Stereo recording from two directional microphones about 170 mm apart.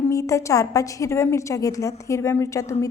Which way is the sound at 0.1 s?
20° left (ahead or behind).